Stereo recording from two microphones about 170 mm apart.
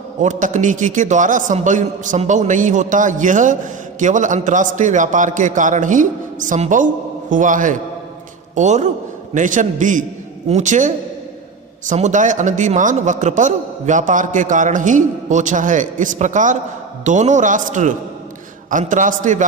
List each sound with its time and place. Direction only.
0.2 s a man's voice: 45° right (ahead or behind)